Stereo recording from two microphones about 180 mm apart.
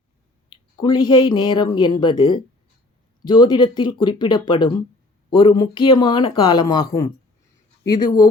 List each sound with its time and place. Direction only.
0.8 s speech: 25° left (ahead or behind)